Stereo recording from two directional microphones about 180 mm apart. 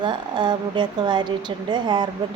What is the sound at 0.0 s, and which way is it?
A woman's voice, 25° right (ahead or behind).